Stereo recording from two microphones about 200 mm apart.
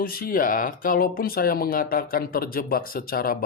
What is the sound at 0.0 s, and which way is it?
Speech, 45° left (ahead or behind).